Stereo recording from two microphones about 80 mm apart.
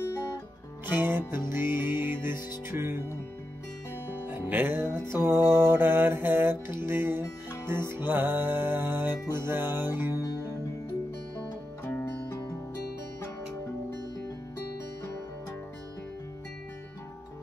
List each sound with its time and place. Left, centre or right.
0.8 s music: right
4.3 s music: right
11.8 s music: left